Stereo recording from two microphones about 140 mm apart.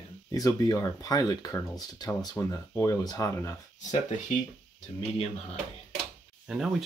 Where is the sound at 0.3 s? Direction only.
25° left (ahead or behind).